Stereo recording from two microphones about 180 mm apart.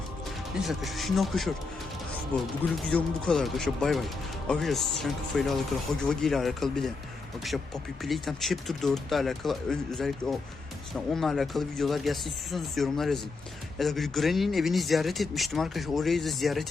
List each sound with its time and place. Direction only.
0.6 s a man's voice: centre (ahead or behind)
2.8 s a man's voice: 5° left (ahead or behind)
8.0 s a man's voice: centre (ahead or behind)